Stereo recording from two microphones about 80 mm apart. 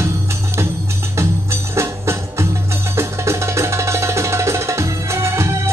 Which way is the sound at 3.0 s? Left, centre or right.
Right.